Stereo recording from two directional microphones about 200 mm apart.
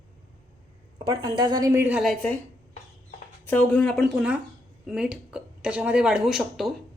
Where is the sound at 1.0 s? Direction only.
20° right (ahead or behind); by 2.3 s 5° left (ahead or behind).